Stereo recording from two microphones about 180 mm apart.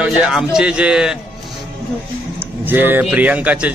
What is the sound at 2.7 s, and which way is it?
Speech, 10° right (ahead or behind).